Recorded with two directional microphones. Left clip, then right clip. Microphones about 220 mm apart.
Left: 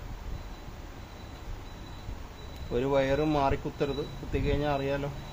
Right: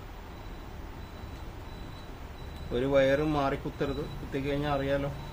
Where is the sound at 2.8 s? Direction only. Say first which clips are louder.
Right 2 dB; 25° left (ahead or behind).